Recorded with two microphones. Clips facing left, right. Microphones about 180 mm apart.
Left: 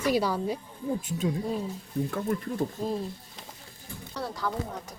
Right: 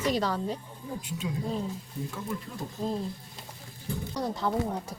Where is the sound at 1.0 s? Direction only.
45° left (ahead or behind).